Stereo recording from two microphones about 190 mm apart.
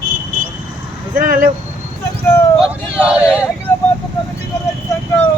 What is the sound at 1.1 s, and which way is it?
Speech, 45° right (ahead or behind).